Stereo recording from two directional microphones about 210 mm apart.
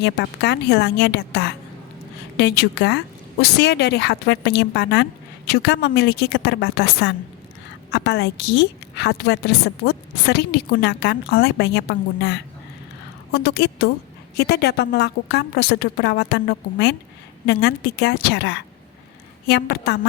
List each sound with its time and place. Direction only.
0.0 s a woman's voice: 55° left (ahead or behind)